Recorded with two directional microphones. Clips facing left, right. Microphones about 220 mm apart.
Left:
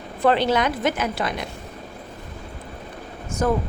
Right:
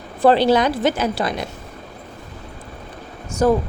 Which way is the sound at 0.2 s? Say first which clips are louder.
Right 5 dB; 35° right (ahead or behind).